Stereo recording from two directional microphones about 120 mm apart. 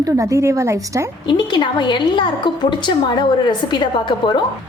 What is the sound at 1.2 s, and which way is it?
A woman's voice, 40° left (ahead or behind).